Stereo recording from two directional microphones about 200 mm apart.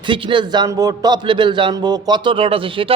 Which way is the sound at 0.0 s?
25° right (ahead or behind).